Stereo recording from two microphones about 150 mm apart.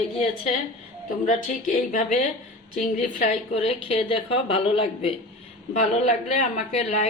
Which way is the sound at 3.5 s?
45° left (ahead or behind).